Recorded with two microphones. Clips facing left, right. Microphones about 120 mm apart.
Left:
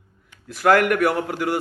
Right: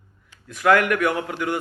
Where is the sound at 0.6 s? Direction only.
40° left (ahead or behind).